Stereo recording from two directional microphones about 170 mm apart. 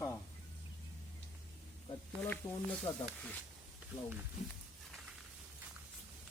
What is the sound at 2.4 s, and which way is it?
Speech, 15° left (ahead or behind).